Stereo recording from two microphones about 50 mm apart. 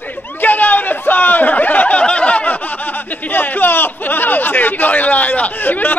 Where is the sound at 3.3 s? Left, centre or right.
Left.